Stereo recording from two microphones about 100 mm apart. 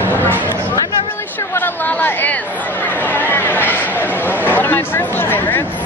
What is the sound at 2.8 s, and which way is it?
Chatter, 15° left (ahead or behind).